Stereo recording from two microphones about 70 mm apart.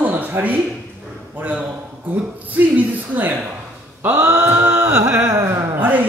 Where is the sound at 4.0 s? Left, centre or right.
Right.